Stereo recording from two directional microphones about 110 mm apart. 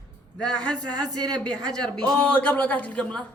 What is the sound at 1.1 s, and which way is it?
Speech, 40° right (ahead or behind).